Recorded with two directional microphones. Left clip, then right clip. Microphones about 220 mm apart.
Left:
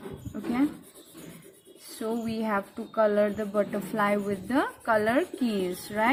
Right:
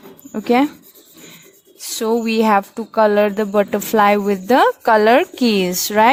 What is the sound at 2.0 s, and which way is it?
A woman's voice, 50° right (ahead or behind).